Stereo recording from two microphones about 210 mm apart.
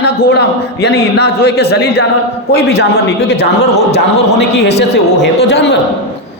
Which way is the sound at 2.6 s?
50° left (ahead or behind).